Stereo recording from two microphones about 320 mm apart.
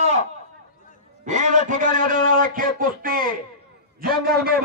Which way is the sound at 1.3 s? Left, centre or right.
Right.